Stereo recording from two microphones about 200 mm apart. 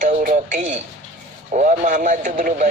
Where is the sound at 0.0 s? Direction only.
40° right (ahead or behind).